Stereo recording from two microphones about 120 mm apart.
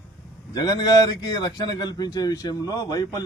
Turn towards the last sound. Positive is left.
turn(degrees=30)  # may be behind; listen again after turning